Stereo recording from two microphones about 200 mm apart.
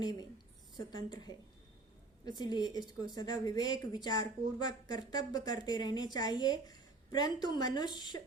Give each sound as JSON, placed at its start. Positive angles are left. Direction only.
{"t": 0.9, "sound": "speech", "side_deg": 20}